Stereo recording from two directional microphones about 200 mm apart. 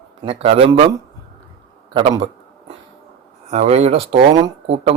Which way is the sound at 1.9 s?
25° right (ahead or behind).